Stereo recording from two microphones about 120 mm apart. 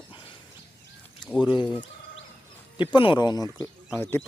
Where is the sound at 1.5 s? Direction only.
40° left (ahead or behind).